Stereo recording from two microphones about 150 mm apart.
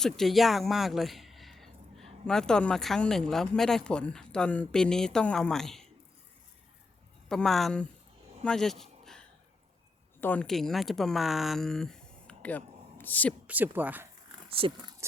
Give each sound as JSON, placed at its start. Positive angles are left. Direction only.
{"t": 0.0, "sound": "a sound", "side_deg": 0}
{"t": 2.2, "sound": "speech", "side_deg": 5}
{"t": 7.3, "sound": "speech", "side_deg": 5}
{"t": 8.4, "sound": "a sound", "side_deg": 5}
{"t": 10.2, "sound": "speech", "side_deg": 10}
{"t": 13.5, "sound": "speech", "side_deg": -10}
{"t": 14.5, "sound": "speech", "side_deg": -35}